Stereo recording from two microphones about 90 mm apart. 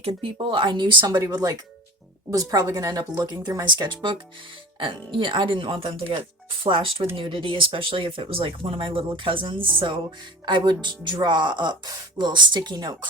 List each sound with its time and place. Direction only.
0.2 s speech: 90° right; by 4.2 s 55° right (ahead or behind)
4.8 s speech: 70° right (ahead or behind)